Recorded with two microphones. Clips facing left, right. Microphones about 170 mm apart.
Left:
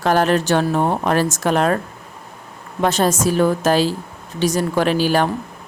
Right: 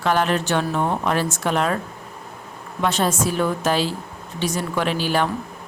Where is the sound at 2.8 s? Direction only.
40° left (ahead or behind).